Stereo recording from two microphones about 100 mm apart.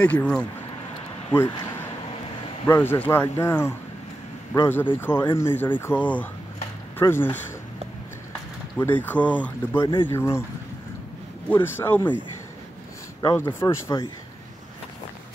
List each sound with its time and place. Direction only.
0.0 s speech: 15° left (ahead or behind)
1.3 s speech: 25° left (ahead or behind)
8.7 s speech: 15° left (ahead or behind)
10.0 s speech: 25° left (ahead or behind)
11.4 s speech: 20° left (ahead or behind)
13.3 s speech: 25° left (ahead or behind)